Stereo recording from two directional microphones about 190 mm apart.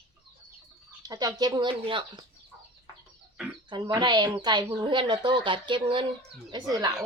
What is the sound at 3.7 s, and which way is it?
Speech, 20° right (ahead or behind).